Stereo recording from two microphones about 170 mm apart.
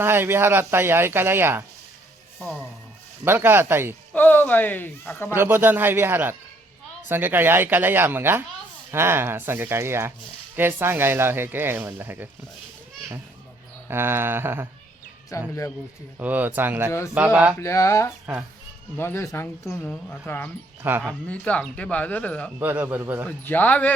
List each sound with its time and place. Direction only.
0.0 s speech: 15° right (ahead or behind)
2.4 s speech: centre (ahead or behind)
3.2 s speech: 15° right (ahead or behind)
4.1 s speech: 10° left (ahead or behind)
5.3 s speech: 15° right (ahead or behind)
13.8 s speech: 15° right (ahead or behind)
15.3 s speech: 20° left (ahead or behind)
16.1 s speech: 10° right (ahead or behind)
17.6 s speech: 15° left (ahead or behind)
22.6 s speech: 10° right (ahead or behind)
23.4 s speech: 10° left (ahead or behind)